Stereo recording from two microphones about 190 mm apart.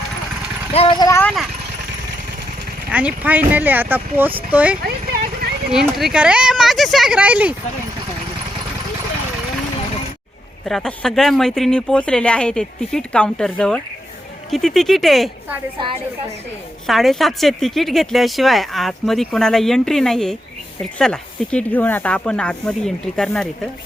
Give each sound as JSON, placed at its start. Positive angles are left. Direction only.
{"t": 0.7, "sound": "speech", "side_deg": 30}
{"t": 1.2, "sound": "speech", "side_deg": 0}
{"t": 2.9, "sound": "speech", "side_deg": -5}
{"t": 4.8, "sound": "horse", "side_deg": -50}
{"t": 5.7, "sound": "speech", "side_deg": 0}
{"t": 10.7, "sound": "speech", "side_deg": 5}
{"t": 15.8, "sound": "a woman's voice", "side_deg": -25}
{"t": 16.8, "sound": "speech", "side_deg": 0}